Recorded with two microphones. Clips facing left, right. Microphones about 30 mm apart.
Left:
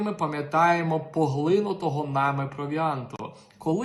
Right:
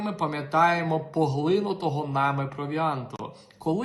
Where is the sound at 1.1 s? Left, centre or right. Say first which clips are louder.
Even; right.